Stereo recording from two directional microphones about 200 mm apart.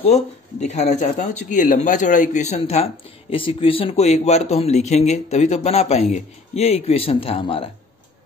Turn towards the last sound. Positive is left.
turn(degrees=30)  # may be behind; listen again after turning